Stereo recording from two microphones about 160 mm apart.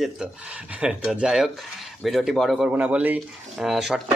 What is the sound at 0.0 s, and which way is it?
Speech, 5° right (ahead or behind).